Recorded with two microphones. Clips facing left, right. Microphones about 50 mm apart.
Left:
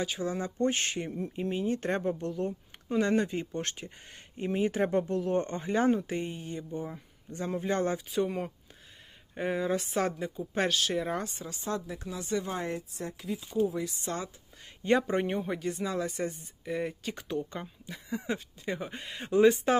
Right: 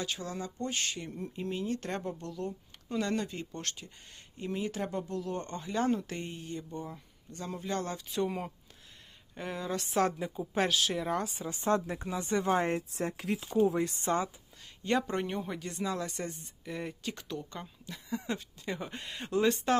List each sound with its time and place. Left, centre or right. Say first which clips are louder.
0.0 s speech: left 5 dB; centre; by 1.1 s left
1.1 s speech: left 4 dB; centre
8.1 s speech: left 3 dB; centre
9.3 s speech: left 6 dB; centre
9.8 s speech: right 1 dB; centre
11.4 s speech: right 5 dB; right
12.5 s speech: right 5 dB; right
13.2 s speech: right 1 dB; right
13.7 s speech: right 3 dB; right
14.8 s speech: left 4 dB; centre
17.2 s speech: left 5 dB; centre